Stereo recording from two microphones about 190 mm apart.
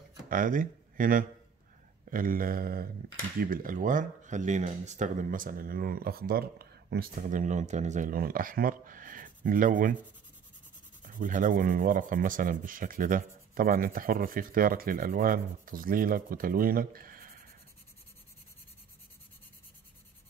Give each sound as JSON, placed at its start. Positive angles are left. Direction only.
{"t": 0.3, "sound": "speech", "side_deg": -45}
{"t": 11.0, "sound": "speech", "side_deg": -45}